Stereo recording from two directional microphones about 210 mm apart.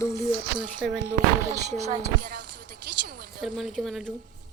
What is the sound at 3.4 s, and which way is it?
Speech, centre (ahead or behind).